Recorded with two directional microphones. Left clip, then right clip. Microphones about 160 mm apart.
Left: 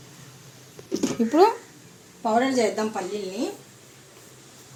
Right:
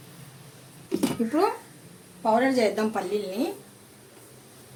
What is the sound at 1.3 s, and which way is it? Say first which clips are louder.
Speech: left 7 dB; 45° left (ahead or behind).